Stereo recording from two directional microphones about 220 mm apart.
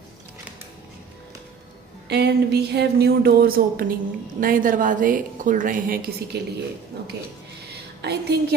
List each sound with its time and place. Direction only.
2.0 s a woman's voice: 50° right (ahead or behind)
8.0 s speech: 50° right (ahead or behind)